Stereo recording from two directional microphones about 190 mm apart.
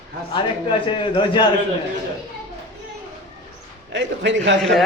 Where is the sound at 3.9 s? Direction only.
70° right (ahead or behind).